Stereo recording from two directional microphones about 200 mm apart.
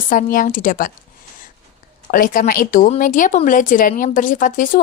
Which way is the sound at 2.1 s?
45° left (ahead or behind).